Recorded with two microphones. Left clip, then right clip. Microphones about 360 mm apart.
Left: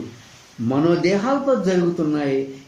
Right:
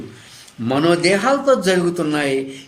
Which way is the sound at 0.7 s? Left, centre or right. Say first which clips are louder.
Right 3 dB; right.